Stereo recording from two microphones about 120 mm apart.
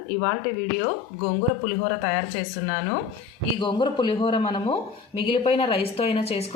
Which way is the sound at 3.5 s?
40° left (ahead or behind).